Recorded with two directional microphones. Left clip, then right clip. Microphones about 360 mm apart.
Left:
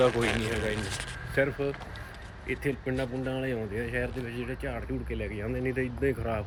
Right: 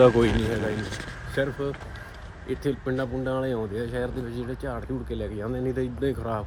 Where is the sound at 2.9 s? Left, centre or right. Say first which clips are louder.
Right 4 dB; centre.